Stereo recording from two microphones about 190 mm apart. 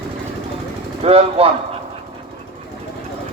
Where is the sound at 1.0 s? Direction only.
30° right (ahead or behind).